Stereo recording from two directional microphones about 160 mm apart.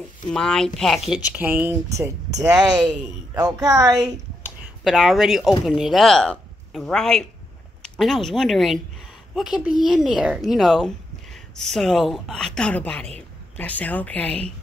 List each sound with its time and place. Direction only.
0.3 s speech: 5° left (ahead or behind); by 4.1 s 20° right (ahead or behind)
4.4 s a sound: centre (ahead or behind)
5.7 s speech: centre (ahead or behind)